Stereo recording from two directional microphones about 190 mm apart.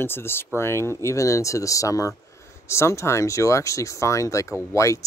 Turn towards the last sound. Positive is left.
turn(degrees=15)  # may be behind; listen again after turning